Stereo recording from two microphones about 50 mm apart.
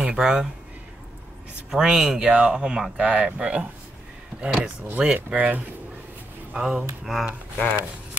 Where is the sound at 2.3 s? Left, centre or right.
Right.